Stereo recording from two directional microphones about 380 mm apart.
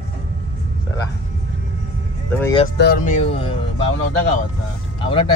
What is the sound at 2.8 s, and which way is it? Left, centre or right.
Speech, left.